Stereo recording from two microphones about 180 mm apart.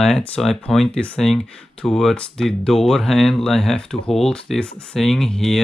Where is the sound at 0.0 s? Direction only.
Centre (ahead or behind).